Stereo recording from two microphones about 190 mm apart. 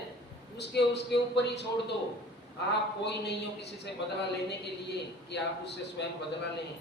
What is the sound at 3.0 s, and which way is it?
Speech, 65° left (ahead or behind).